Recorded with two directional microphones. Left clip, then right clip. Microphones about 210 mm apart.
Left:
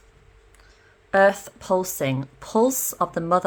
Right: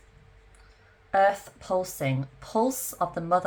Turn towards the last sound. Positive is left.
turn(degrees=45)  # may be behind; listen again after turning